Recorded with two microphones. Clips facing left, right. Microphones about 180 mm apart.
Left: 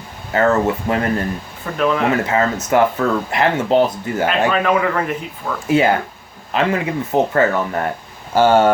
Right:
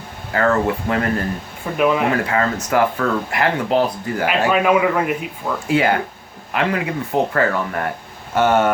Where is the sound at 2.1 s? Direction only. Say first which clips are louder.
Left 2 dB; 25° left (ahead or behind).